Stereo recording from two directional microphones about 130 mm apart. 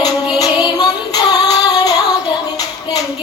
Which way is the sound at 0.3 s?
30° left (ahead or behind).